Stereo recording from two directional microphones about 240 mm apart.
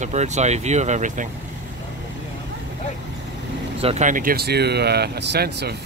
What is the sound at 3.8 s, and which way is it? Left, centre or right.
Speech, right.